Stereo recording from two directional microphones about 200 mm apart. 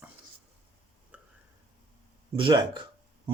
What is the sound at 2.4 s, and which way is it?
Speech, 25° right (ahead or behind).